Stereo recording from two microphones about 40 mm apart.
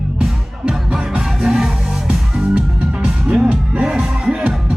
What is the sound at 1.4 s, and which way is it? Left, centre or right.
Music, centre.